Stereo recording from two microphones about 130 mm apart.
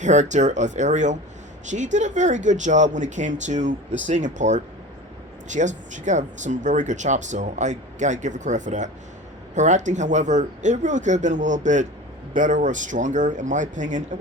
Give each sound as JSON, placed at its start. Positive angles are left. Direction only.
{"t": 0.0, "sound": "speech", "side_deg": -65}